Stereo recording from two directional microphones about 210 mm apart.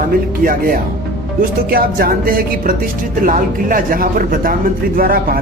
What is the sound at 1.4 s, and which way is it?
Speech, 45° right (ahead or behind).